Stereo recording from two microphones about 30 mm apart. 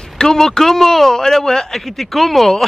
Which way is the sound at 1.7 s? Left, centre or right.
Centre.